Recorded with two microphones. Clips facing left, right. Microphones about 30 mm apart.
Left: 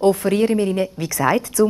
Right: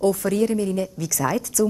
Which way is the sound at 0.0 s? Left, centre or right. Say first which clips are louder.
Left 4 dB; left.